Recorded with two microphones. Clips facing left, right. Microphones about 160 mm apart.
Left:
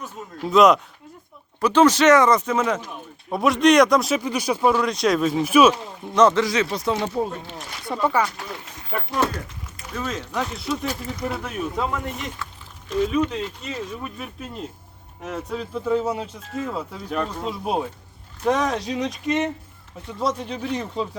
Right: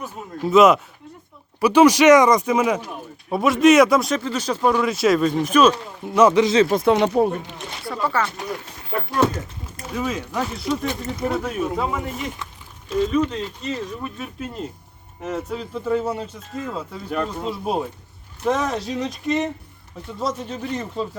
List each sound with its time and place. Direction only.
0.0 s speech: centre (ahead or behind)
4.1 s speech: 15° left (ahead or behind)
6.1 s speech: 10° right (ahead or behind)
6.4 s speech: 25° right (ahead or behind)
6.7 s speech: 55° right (ahead or behind); by 7.3 s 75° right (ahead or behind)
7.9 s speech: 15° left (ahead or behind)
9.9 s speech: 10° right (ahead or behind)
10.8 s speech: 25° right (ahead or behind)
11.3 s speech: centre (ahead or behind)
13.3 s speech: 5° left (ahead or behind)